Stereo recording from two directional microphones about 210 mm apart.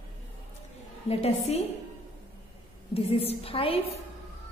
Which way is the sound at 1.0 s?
30° left (ahead or behind).